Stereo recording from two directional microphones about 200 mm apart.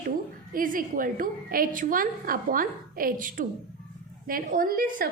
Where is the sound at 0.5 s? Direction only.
45° right (ahead or behind).